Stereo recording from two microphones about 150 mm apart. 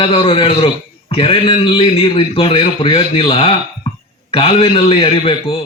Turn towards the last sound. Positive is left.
turn(degrees=40)  # may be behind; listen again after turning